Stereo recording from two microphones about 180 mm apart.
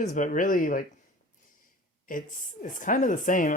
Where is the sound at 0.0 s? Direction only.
45° left (ahead or behind).